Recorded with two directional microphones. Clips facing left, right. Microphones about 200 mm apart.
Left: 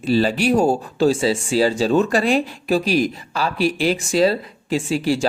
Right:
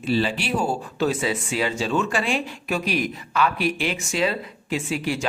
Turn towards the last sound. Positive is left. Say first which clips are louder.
# left 6 dB
turn(degrees=35)  # may be behind; listen again after turning